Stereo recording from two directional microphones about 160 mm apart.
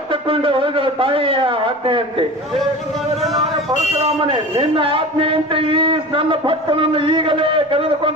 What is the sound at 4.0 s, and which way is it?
A man's voice, 30° right (ahead or behind).